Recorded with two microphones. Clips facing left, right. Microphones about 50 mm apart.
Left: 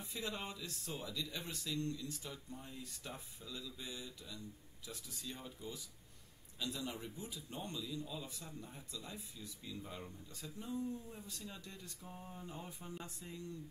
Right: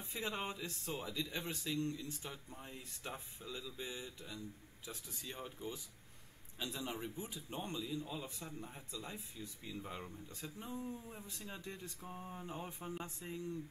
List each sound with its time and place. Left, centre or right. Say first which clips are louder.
0.0 s speech: right 2 dB; right